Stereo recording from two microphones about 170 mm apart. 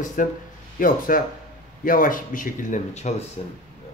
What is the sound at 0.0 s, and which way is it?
A man's voice, 50° left (ahead or behind).